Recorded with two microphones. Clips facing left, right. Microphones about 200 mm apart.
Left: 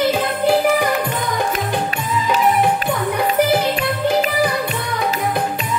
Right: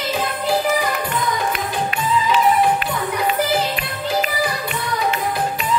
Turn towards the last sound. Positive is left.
turn(degrees=55)  # may be behind; listen again after turning